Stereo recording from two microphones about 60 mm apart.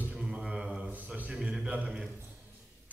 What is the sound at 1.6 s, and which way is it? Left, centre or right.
Speech, centre.